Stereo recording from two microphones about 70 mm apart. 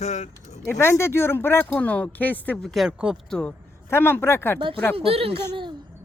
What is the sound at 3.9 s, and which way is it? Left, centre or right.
Speech, left.